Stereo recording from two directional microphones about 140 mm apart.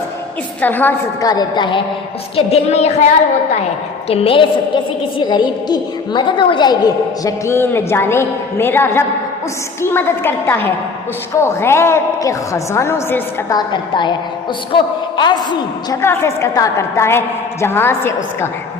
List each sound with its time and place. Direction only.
0.6 s a woman's voice: 15° left (ahead or behind)
1.2 s a woman's voice: 25° left (ahead or behind)
2.3 s a sound: 50° left (ahead or behind)
4.1 s a woman's voice: 40° left (ahead or behind); by 13.2 s 15° left (ahead or behind)
13.5 s a woman's voice: 30° left (ahead or behind)
16.0 s a woman's voice: 20° left (ahead or behind)